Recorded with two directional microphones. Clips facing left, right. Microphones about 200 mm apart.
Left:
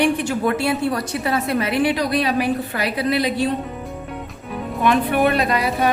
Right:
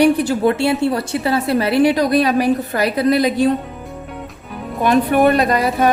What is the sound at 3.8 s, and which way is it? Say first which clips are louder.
Music: even; centre (ahead or behind).